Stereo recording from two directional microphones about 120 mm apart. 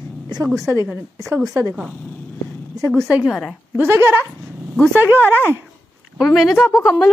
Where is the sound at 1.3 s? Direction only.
30° right (ahead or behind).